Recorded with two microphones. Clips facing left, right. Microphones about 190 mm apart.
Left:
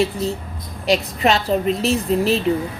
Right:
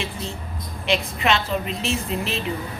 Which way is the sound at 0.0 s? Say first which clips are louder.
Left 10 dB; 40° left (ahead or behind).